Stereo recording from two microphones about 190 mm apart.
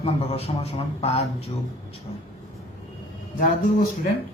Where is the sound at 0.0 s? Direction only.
30° left (ahead or behind).